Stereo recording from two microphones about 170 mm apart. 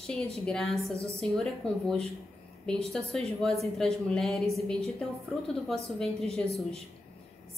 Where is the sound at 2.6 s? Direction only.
5° left (ahead or behind).